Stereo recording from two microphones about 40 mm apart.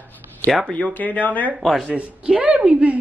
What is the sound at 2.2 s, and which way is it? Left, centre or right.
Speech, right.